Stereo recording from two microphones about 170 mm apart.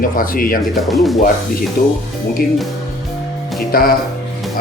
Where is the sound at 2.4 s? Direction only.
65° left (ahead or behind).